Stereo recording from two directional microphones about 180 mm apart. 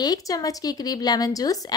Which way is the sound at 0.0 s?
20° left (ahead or behind).